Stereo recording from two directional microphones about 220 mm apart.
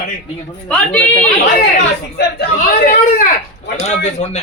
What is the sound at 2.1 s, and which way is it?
Speech, 45° left (ahead or behind).